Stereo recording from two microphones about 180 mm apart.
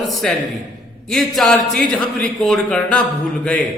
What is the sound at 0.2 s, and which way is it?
A man's voice, 5° left (ahead or behind).